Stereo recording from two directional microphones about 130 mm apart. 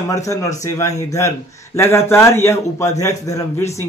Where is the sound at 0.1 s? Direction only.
25° left (ahead or behind).